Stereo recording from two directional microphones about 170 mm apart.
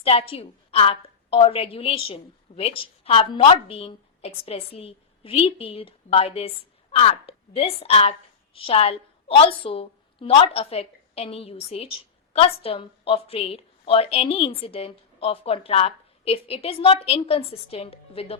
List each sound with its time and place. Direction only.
0.0 s a woman's voice: 35° left (ahead or behind)